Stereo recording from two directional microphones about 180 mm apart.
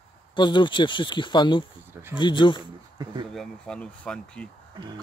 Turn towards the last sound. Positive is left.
turn(degrees=5)  # may be behind; listen again after turning